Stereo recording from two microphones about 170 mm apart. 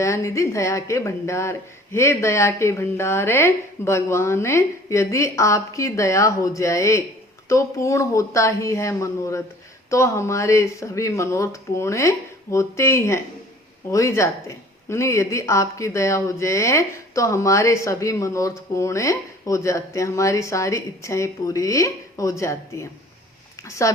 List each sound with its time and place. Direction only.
0.0 s speech: 15° left (ahead or behind)